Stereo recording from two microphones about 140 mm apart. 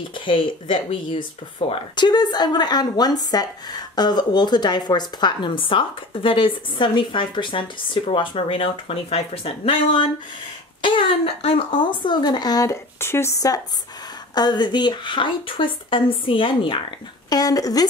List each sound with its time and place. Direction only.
0.2 s a woman's voice: 35° left (ahead or behind)
17.3 s speech: 25° left (ahead or behind)